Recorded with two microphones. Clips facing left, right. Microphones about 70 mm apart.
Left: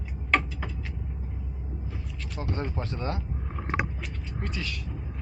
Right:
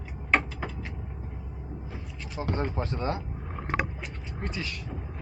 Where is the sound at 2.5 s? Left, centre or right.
Right.